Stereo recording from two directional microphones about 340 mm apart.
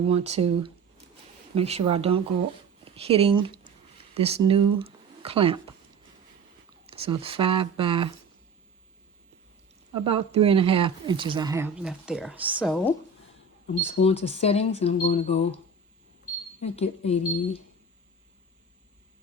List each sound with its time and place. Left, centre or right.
0.0 s speech: centre
6.8 s speech: centre
9.9 s speech: centre
14.0 s speech: centre
16.6 s speech: centre